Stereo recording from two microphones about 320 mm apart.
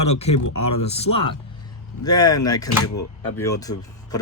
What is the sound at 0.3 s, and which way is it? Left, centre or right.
Speech, left.